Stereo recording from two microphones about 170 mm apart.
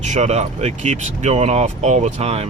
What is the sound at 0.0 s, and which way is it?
Speech, 45° right (ahead or behind).